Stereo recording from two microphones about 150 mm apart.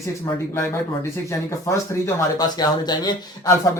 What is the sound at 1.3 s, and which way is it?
Speech, 20° left (ahead or behind).